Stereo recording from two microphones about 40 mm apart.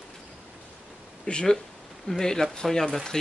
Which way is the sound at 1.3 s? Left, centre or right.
Left.